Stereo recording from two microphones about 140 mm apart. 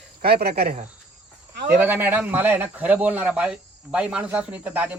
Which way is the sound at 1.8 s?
15° right (ahead or behind).